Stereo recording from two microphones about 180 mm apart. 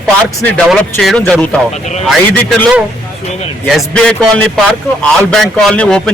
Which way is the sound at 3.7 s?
Centre (ahead or behind).